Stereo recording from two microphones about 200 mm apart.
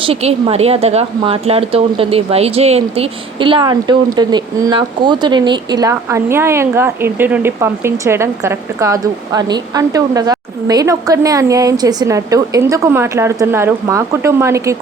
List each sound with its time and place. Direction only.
0.0 s speech: 30° right (ahead or behind); by 14.8 s 15° right (ahead or behind)